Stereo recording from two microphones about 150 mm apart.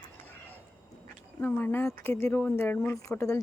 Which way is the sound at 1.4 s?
10° left (ahead or behind).